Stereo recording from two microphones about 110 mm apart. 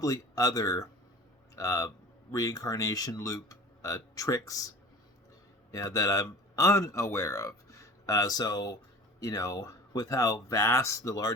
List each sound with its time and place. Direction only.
0.0 s a man's voice: 30° left (ahead or behind)
5.7 s speech: 30° left (ahead or behind)